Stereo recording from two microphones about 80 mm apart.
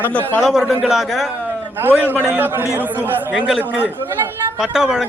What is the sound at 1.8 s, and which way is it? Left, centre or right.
Speech, right.